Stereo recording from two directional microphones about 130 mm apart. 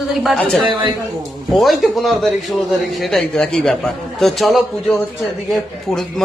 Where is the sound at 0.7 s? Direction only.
35° right (ahead or behind).